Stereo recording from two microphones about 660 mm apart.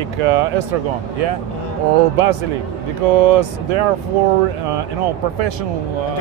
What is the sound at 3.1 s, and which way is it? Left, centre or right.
Speech, right.